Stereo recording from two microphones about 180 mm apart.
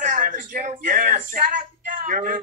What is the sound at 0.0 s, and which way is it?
Speech, 45° right (ahead or behind).